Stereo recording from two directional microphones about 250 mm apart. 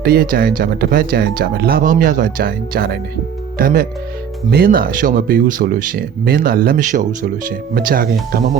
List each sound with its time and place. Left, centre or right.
0.0 s speech: right
4.5 s speech: right